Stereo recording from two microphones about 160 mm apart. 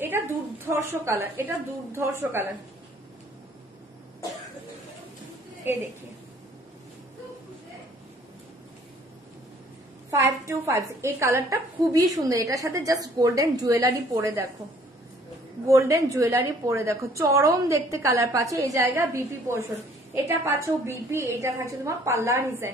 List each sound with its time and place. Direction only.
0.1 s a sound: 15° right (ahead or behind)
0.7 s a woman's voice: 15° right (ahead or behind)
10.4 s a woman's voice: 15° right (ahead or behind)
15.6 s a woman's voice: 20° right (ahead or behind)